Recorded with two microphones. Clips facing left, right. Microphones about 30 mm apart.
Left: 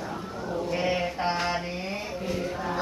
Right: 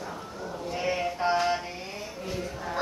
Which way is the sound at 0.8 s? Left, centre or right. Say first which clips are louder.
Right 1 dB; left.